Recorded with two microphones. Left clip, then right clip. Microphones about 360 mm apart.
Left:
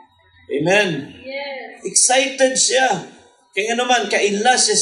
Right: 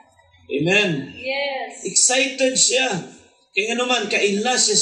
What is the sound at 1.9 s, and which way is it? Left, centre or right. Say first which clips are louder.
Speech: left 3 dB; centre.